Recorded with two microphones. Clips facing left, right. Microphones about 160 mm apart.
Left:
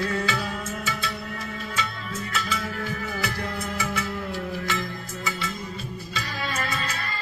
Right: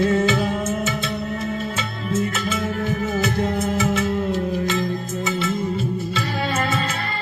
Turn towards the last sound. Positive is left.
turn(degrees=-25)  # may be behind; listen again after turning